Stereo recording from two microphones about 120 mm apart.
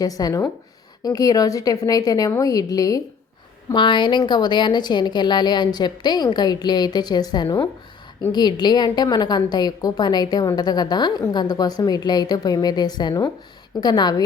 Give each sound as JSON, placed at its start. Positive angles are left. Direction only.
{"t": 0.0, "sound": "a woman's voice", "side_deg": 30}
{"t": 3.7, "sound": "a woman's voice", "side_deg": 40}